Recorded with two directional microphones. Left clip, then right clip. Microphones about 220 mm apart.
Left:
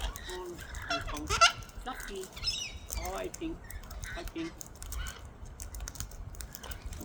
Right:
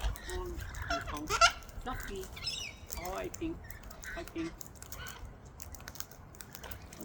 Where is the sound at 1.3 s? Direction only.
5° right (ahead or behind).